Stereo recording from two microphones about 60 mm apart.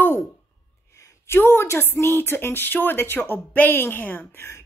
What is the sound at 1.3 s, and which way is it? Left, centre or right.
Speech, left.